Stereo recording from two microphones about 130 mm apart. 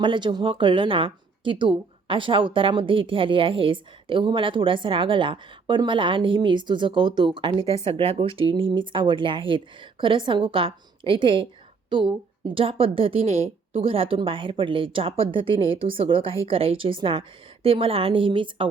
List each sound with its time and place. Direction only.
0.0 s a woman's voice: 35° right (ahead or behind)